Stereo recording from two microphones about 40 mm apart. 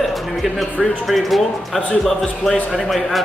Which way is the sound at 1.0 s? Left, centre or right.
Centre.